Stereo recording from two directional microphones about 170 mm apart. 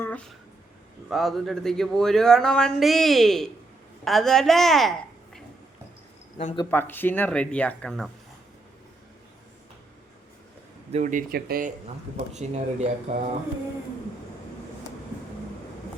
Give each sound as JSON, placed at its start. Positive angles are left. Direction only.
{"t": 0.0, "sound": "a sound", "side_deg": 10}
{"t": 1.1, "sound": "a woman's voice", "side_deg": 0}
{"t": 6.7, "sound": "speech", "side_deg": 10}
{"t": 10.9, "sound": "speech", "side_deg": -50}
{"t": 12.1, "sound": "speech", "side_deg": -40}